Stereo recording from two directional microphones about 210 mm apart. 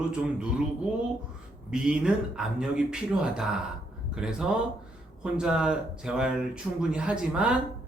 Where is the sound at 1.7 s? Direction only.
5° right (ahead or behind).